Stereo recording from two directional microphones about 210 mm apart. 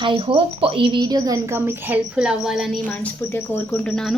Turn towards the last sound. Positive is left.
turn(degrees=5)  # may be behind; listen again after turning